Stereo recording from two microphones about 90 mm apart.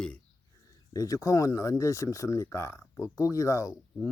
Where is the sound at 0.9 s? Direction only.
40° left (ahead or behind).